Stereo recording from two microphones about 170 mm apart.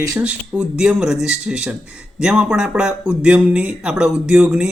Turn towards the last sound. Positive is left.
turn(degrees=-5)  # may be behind; listen again after turning